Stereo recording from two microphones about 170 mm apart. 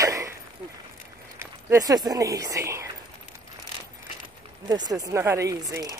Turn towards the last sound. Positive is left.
turn(degrees=-20)  # may be behind; listen again after turning